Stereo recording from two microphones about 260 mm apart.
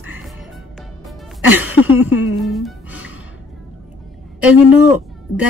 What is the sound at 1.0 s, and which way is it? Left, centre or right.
Music, centre.